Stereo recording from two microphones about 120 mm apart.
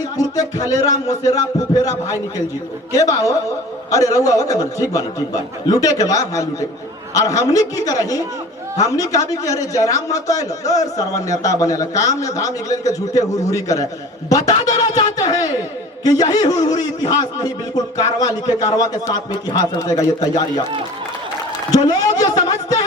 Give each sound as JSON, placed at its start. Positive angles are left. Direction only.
{"t": 0.2, "sound": "a man's voice", "side_deg": 30}
{"t": 2.9, "sound": "a man's voice", "side_deg": 30}
{"t": 21.8, "sound": "a man's voice", "side_deg": 30}